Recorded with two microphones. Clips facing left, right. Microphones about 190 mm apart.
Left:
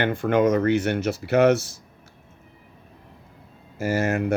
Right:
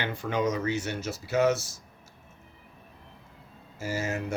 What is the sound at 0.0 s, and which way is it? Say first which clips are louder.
Speech: left 9 dB; 55° left (ahead or behind).